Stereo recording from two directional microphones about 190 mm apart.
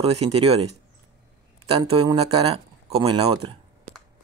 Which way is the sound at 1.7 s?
30° right (ahead or behind).